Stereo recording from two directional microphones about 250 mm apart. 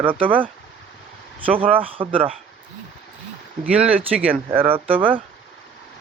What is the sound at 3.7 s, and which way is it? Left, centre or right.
Speech, centre.